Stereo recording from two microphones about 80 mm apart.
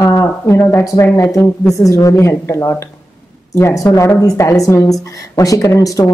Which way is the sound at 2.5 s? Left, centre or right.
Left.